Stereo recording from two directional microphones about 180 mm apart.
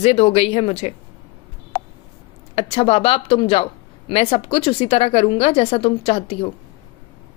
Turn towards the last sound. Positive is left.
turn(degrees=30)  # may be behind; listen again after turning